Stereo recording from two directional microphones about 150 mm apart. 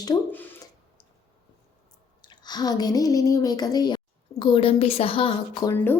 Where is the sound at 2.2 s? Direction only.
30° left (ahead or behind).